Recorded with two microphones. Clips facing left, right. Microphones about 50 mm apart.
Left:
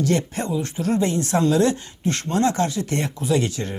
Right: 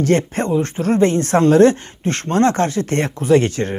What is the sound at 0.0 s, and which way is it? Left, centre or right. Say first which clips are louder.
Speech: right 5 dB; right.